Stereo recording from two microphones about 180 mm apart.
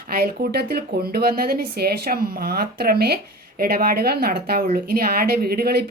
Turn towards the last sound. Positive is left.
turn(degrees=-60)  # may be behind; listen again after turning